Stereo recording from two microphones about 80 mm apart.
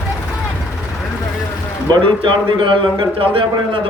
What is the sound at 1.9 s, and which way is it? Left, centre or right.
A man's voice, right.